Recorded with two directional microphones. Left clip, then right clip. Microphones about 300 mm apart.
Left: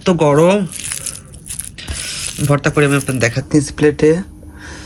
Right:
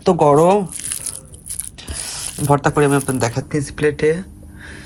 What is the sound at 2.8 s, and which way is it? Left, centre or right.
Speech, right.